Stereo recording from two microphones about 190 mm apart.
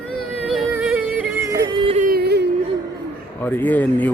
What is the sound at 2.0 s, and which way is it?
Yodeling, 55° right (ahead or behind).